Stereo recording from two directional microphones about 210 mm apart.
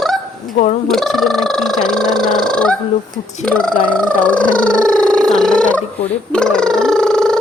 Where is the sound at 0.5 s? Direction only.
35° left (ahead or behind).